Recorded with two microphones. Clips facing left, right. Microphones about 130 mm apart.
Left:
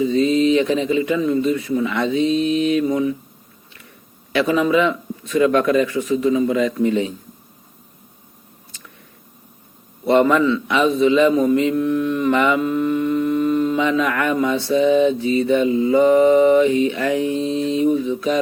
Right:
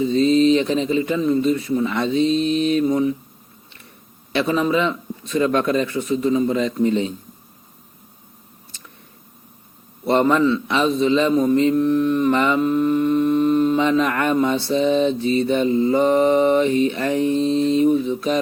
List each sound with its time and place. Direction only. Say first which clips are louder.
0.0 s speech: right 1 dB; 30° right (ahead or behind)
4.3 s speech: left 2 dB; 30° right (ahead or behind)
10.1 s speech: left 2 dB; 30° right (ahead or behind)
11.4 s mantra: right 1 dB; 35° right (ahead or behind)
15.6 s mantra: even; 15° left (ahead or behind)
15.9 s speech: left 5 dB; 30° right (ahead or behind)
17.2 s mantra: right 2 dB; 10° left (ahead or behind)
18.1 s speech: left 1 dB; 35° right (ahead or behind)